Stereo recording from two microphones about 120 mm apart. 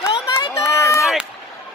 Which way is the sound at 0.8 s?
25° left (ahead or behind).